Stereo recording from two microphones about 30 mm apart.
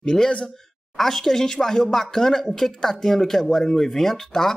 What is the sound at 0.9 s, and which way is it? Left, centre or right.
Speech, centre.